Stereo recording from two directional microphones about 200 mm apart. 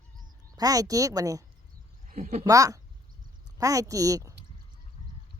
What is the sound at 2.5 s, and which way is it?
Speech, 15° right (ahead or behind).